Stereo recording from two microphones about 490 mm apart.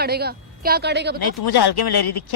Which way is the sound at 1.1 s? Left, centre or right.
Left.